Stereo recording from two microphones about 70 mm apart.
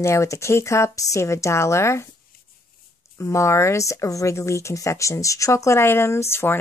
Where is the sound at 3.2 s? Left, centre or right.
Left.